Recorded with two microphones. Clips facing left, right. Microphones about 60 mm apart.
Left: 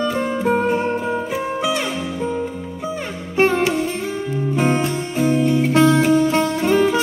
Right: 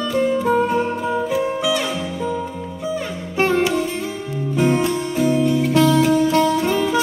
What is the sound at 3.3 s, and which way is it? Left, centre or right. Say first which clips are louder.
Music: left 1 dB; left.